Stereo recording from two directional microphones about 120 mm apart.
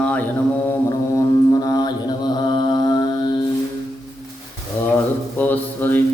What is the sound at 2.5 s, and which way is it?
Mantra, 40° left (ahead or behind).